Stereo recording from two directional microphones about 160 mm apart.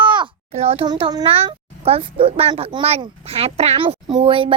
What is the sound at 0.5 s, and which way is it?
A child's voice, 40° right (ahead or behind).